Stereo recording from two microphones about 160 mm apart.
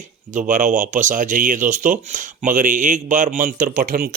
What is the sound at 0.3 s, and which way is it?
Speech, 50° right (ahead or behind).